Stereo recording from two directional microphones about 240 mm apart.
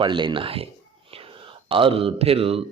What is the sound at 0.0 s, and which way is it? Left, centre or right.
Mantra, centre.